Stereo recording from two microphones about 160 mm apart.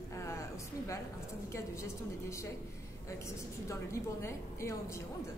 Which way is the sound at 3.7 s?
20° left (ahead or behind).